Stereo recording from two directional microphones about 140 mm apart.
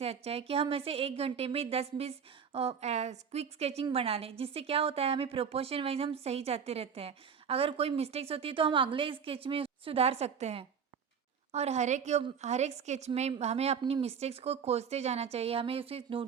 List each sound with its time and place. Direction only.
0.0 s a woman's voice: 45° right (ahead or behind)